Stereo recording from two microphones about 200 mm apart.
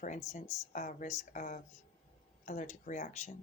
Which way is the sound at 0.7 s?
40° left (ahead or behind).